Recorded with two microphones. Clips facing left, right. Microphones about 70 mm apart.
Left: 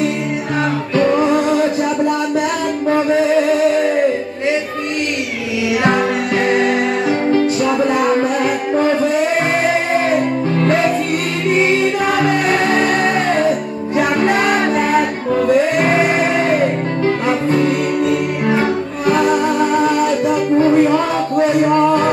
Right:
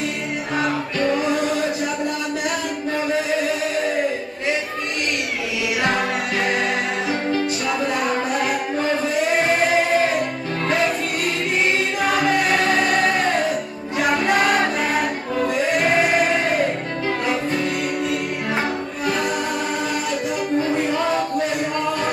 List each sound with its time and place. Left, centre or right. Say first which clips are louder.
19.0 s music: left 9 dB; left
20.5 s music: left 9 dB; left